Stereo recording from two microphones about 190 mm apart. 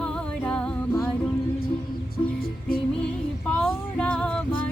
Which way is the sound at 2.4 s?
50° left (ahead or behind).